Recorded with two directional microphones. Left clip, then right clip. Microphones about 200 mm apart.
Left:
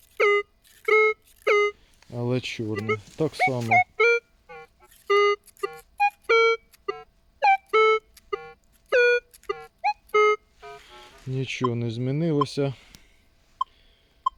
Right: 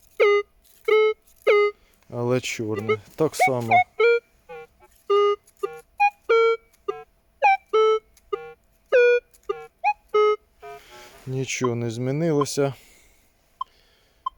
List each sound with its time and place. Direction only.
0.2 s a sound: 40° right (ahead or behind)
0.9 s a sound: 25° right (ahead or behind)
2.0 s speech: 10° right (ahead or behind)
3.7 s music: 20° right (ahead or behind)
5.6 s music: 30° right (ahead or behind)
6.3 s music: 15° right (ahead or behind)
7.8 s music: 15° right (ahead or behind)
8.3 s music: 25° right (ahead or behind)
10.8 s speech: 5° right (ahead or behind)